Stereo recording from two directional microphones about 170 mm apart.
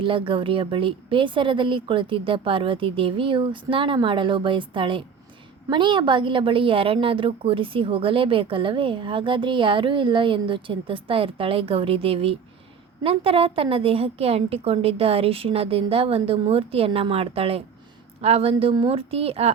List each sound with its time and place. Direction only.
0.0 s a woman's voice: 30° right (ahead or behind)